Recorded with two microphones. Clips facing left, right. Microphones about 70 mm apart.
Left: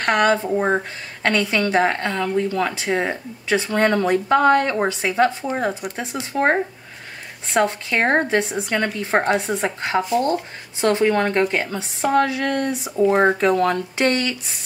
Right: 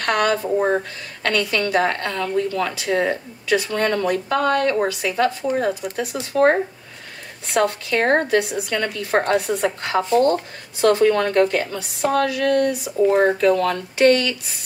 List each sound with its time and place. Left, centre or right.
0.0 s a woman's voice: left
9.2 s speech: centre
9.8 s a woman's voice: left
10.0 s speech: centre
10.8 s a woman's voice: left